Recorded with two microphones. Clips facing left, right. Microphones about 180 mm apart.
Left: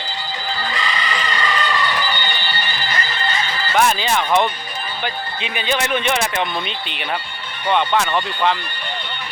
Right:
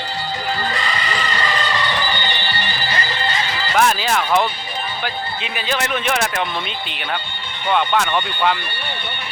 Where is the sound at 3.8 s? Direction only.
Centre (ahead or behind).